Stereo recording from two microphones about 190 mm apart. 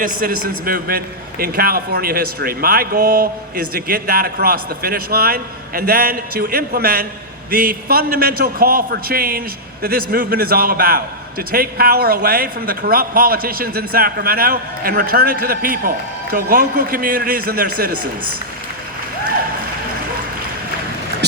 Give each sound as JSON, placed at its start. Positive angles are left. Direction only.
{"t": 0.0, "sound": "a man's voice", "side_deg": -50}